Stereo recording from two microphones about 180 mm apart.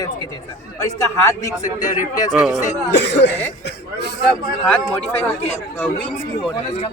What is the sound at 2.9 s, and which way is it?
Speech, 70° left (ahead or behind).